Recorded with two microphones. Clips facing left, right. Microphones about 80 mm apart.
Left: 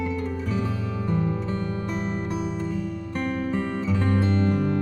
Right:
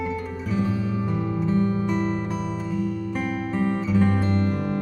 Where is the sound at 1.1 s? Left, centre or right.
Centre.